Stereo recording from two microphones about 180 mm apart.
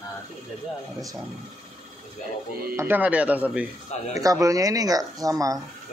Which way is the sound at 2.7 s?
10° right (ahead or behind).